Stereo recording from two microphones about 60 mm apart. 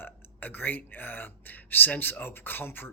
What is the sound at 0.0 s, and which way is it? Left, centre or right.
Speech, left.